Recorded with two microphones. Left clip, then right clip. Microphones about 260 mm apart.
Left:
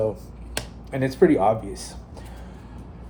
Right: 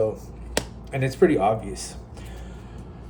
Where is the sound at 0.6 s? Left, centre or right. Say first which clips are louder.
Right 5 dB; right.